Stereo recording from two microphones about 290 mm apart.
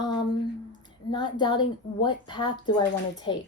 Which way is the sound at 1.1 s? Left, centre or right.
Centre.